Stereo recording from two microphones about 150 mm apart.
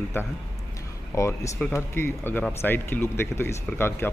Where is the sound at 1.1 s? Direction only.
20° left (ahead or behind).